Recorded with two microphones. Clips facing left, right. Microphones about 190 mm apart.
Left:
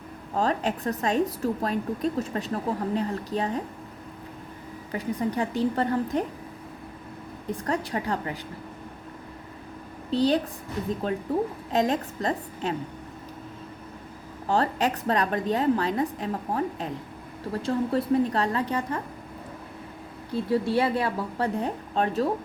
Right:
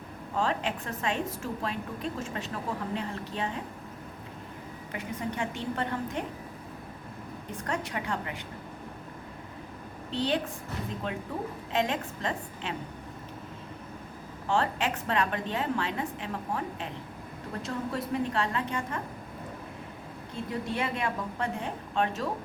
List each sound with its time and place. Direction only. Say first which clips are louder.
0.3 s a woman's voice: left 4 dB; 40° left (ahead or behind)
4.9 s a woman's voice: left 7 dB; 35° left (ahead or behind)
7.5 s a woman's voice: left 5 dB; 35° left (ahead or behind)
10.1 s a woman's voice: left 7 dB; 40° left (ahead or behind)
11.7 s a woman's voice: left 4 dB; 40° left (ahead or behind)
14.4 s a woman's voice: left 4 dB; 40° left (ahead or behind)
20.3 s a woman's voice: left 9 dB; 35° left (ahead or behind)